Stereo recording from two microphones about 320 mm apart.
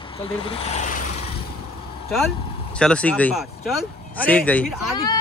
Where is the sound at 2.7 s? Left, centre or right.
Centre.